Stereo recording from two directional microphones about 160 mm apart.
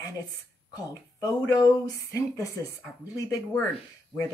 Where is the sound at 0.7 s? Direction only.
20° left (ahead or behind).